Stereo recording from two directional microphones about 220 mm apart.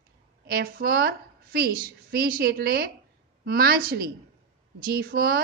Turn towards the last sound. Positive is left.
turn(degrees=-45)  # may be behind; listen again after turning